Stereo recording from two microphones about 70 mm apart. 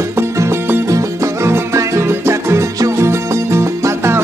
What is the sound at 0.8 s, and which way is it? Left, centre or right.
Music, right.